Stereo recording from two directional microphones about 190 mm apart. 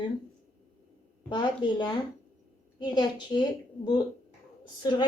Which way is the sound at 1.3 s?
25° left (ahead or behind).